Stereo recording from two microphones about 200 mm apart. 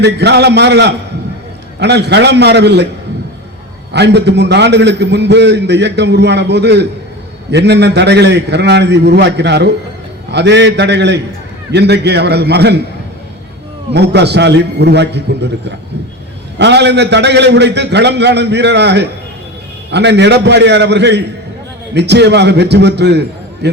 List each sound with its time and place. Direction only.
0.0 s a man's voice: 55° right (ahead or behind)
3.9 s a man's voice: 60° right (ahead or behind)
13.9 s a man's voice: 55° right (ahead or behind)
16.6 s a man's voice: 60° right (ahead or behind)